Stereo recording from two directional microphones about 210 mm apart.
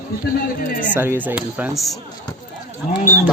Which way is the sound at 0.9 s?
10° right (ahead or behind).